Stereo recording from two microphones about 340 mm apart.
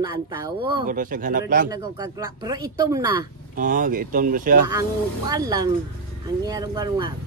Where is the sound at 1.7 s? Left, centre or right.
Centre.